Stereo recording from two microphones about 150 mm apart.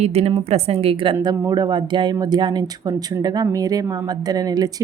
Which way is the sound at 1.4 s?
25° right (ahead or behind).